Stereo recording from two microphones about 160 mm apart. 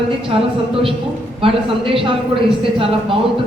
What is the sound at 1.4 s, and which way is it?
Speech, 35° right (ahead or behind).